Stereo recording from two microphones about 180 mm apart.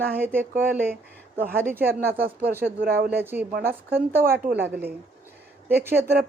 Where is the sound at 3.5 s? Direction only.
60° right (ahead or behind).